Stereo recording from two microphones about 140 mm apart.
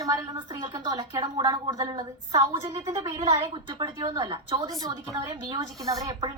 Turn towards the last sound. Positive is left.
turn(degrees=-25)  # may be behind; listen again after turning